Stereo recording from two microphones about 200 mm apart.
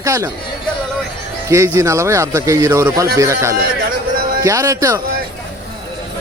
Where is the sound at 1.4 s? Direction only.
15° right (ahead or behind).